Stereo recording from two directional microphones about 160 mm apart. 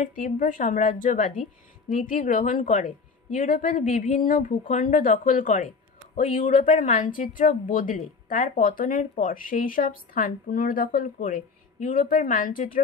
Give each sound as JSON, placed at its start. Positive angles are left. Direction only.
{"t": 0.0, "sound": "a woman's voice", "side_deg": 55}